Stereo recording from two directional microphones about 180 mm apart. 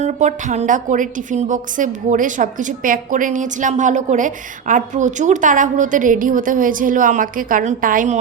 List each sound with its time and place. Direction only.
0.0 s a woman's voice: 40° right (ahead or behind)